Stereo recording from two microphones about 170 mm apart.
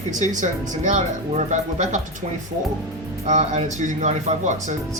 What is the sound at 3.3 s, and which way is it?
Speech, 45° right (ahead or behind).